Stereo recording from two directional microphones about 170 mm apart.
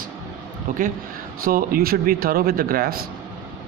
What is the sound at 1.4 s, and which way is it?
A man's voice, 60° right (ahead or behind).